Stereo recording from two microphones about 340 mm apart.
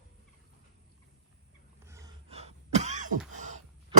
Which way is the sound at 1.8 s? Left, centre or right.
Centre.